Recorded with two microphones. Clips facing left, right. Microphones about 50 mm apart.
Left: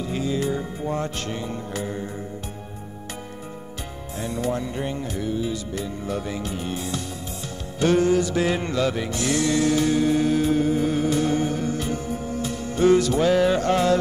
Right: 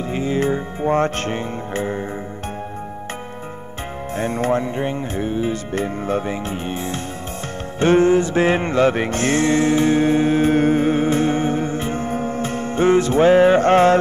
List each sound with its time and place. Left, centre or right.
0.1 s music: right
4.1 s music: right